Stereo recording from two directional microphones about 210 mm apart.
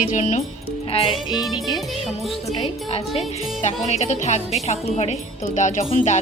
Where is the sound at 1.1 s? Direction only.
Centre (ahead or behind).